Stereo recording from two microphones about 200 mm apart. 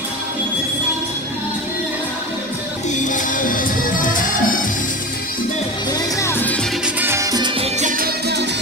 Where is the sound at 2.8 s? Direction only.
40° left (ahead or behind).